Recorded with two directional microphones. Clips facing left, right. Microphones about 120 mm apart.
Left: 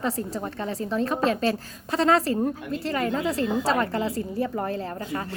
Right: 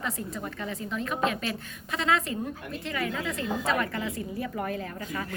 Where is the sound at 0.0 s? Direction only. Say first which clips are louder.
Left 6 dB; 35° left (ahead or behind).